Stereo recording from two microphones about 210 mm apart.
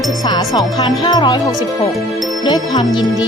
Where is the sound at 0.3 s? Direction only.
15° left (ahead or behind).